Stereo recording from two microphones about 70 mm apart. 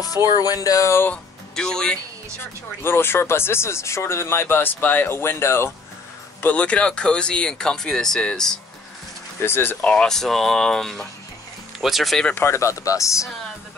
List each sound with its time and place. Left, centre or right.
0.0 s speech: left
1.1 s speech: centre
2.4 s speech: left
6.4 s speech: centre
9.4 s speech: left
9.8 s speech: centre
12.4 s speech: left